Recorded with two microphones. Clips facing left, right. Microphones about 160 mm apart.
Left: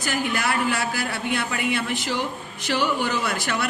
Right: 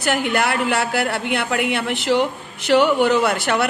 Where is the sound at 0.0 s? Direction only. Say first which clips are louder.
Right 6 dB; 65° right (ahead or behind).